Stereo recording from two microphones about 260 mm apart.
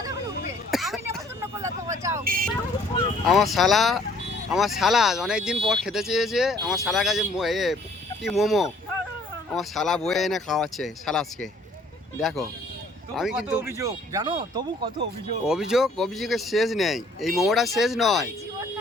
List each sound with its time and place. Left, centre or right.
0.7 s a sound: centre
1.5 s vehicle: centre
2.2 s vehicle: right
3.2 s speech: centre
13.1 s speech: centre
15.4 s speech: centre